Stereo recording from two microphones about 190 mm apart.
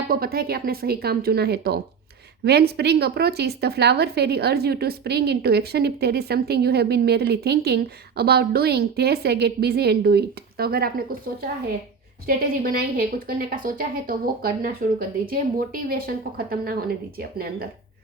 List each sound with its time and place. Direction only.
0.1 s speech: 50° right (ahead or behind)
12.2 s a woman's voice: 50° right (ahead or behind)